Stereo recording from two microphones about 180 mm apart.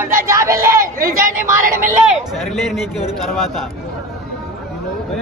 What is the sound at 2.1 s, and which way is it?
Speech, centre (ahead or behind).